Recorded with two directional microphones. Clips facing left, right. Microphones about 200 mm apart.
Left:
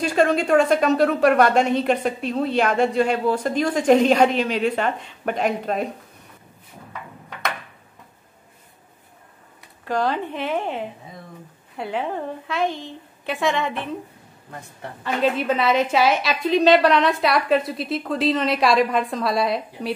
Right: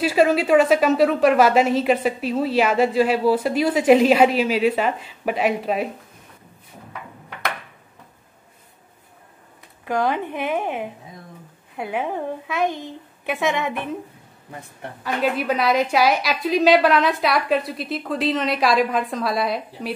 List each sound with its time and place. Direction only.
0.0 s a woman's voice: 5° right (ahead or behind)
9.8 s a woman's voice: 15° right (ahead or behind)